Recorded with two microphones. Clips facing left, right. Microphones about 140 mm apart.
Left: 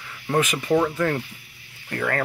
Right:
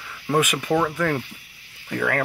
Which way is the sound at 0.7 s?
10° left (ahead or behind).